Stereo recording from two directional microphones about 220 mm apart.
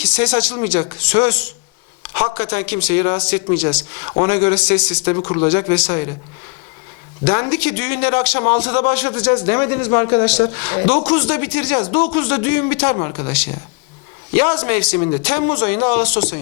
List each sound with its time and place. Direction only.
0.0 s a man's voice: 10° left (ahead or behind)
2.1 s a man's voice: 25° left (ahead or behind)
2.4 s a man's voice: 10° left (ahead or behind)
5.1 s a man's voice: 20° left (ahead or behind)
7.3 s a man's voice: 10° left (ahead or behind)
10.8 s a man's voice: 25° left (ahead or behind)
11.0 s a man's voice: 10° left (ahead or behind)
14.3 s a man's voice: 15° left (ahead or behind)